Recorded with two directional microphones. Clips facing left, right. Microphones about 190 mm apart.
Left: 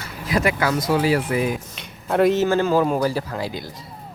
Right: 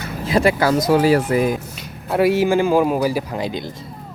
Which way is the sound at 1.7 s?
5° right (ahead or behind).